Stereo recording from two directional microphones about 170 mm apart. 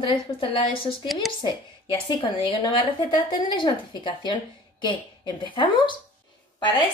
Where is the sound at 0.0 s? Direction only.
30° left (ahead or behind).